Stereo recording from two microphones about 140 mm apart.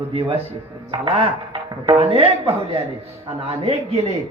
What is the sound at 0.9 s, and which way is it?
A man's voice, 40° right (ahead or behind).